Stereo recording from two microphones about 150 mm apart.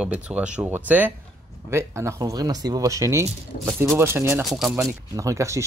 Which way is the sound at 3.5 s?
65° left (ahead or behind).